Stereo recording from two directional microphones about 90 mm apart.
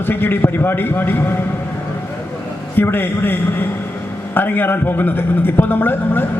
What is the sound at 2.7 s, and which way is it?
A man's voice, 25° left (ahead or behind).